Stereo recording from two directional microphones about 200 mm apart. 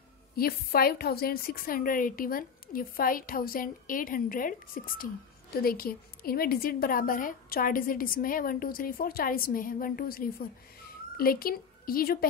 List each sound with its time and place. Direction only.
0.4 s a woman's voice: 50° left (ahead or behind)